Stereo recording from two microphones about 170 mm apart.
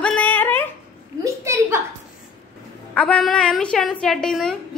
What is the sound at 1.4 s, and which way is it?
Speech, 15° right (ahead or behind).